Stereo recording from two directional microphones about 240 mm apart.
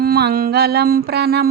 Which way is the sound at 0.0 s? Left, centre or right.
Right.